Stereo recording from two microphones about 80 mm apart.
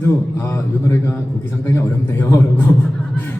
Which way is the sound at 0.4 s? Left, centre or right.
Left.